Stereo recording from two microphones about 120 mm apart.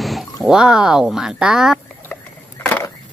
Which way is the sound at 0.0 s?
Centre (ahead or behind).